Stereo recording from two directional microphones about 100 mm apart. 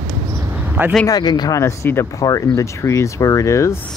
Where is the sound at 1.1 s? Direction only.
40° left (ahead or behind).